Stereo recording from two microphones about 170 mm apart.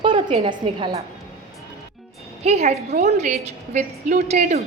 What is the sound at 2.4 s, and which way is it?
A woman's voice, 40° right (ahead or behind).